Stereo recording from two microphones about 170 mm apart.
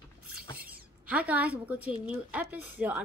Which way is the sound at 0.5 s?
60° right (ahead or behind).